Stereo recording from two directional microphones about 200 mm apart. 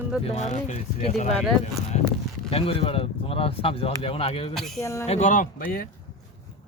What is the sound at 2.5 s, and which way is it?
Speech, 30° left (ahead or behind).